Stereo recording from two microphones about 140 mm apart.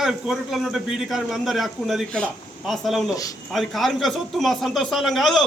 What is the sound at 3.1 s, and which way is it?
Speech, 25° left (ahead or behind).